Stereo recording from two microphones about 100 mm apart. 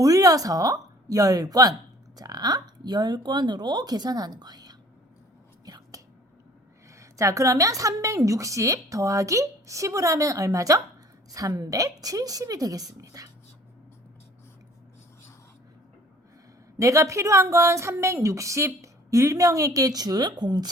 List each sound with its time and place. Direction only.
0.0 s a woman's voice: 35° right (ahead or behind)
5.6 s whispering: 40° right (ahead or behind)
7.0 s a woman's voice: 30° right (ahead or behind)
16.7 s a woman's voice: 30° right (ahead or behind)